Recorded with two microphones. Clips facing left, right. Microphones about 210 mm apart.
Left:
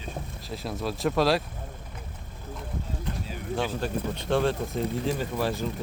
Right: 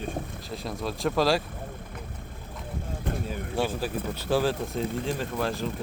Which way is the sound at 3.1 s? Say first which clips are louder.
Right 4 dB; 50° right (ahead or behind).